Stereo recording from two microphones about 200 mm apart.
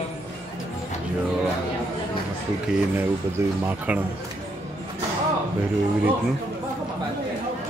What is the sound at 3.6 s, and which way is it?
Speech, 10° right (ahead or behind).